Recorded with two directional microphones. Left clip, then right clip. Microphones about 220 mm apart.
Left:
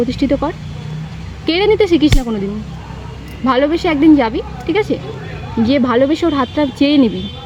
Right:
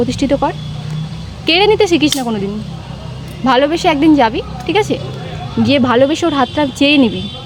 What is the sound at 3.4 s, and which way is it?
Speech, 5° right (ahead or behind).